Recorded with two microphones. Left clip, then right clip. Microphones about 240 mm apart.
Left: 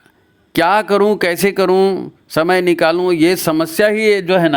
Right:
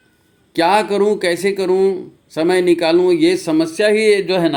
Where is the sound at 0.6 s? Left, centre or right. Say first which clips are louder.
Left 2 dB; left.